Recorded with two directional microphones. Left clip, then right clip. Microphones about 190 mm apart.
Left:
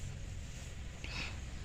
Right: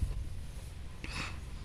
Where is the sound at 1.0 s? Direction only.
45° right (ahead or behind).